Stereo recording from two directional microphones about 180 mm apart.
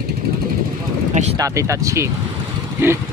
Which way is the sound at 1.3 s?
20° right (ahead or behind).